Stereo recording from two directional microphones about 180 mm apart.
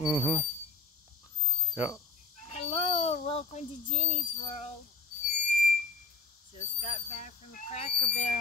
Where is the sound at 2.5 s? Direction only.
35° left (ahead or behind).